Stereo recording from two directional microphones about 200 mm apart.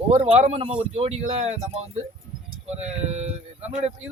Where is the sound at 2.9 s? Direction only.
35° right (ahead or behind).